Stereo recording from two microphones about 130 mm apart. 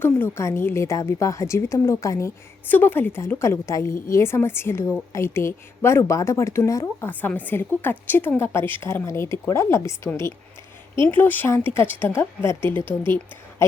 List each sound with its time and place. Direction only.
0.0 s a woman's voice: 20° left (ahead or behind)